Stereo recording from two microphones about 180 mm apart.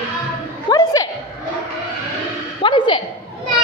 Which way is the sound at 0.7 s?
20° left (ahead or behind).